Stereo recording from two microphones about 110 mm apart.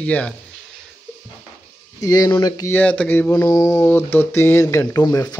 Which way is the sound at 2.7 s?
15° left (ahead or behind).